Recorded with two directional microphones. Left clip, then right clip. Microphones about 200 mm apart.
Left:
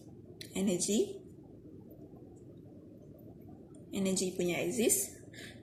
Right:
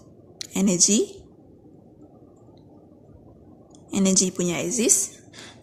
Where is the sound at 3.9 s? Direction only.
50° right (ahead or behind).